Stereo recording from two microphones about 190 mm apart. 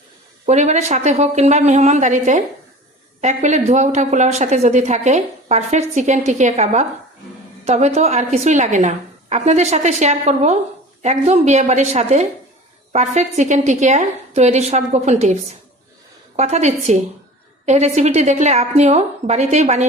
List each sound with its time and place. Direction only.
0.4 s a woman's voice: 35° right (ahead or behind)